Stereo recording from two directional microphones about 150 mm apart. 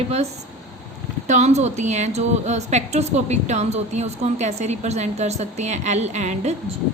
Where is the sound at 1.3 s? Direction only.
50° right (ahead or behind).